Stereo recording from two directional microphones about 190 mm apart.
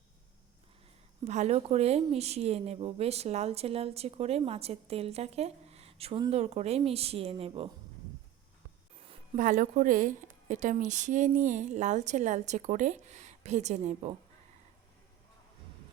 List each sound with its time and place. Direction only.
1.2 s speech: 35° right (ahead or behind)
9.3 s speech: 45° right (ahead or behind)